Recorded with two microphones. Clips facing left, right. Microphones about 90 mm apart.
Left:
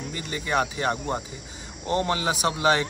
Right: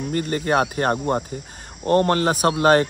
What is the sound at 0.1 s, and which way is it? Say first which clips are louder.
A man's voice: right 6 dB; 50° right (ahead or behind).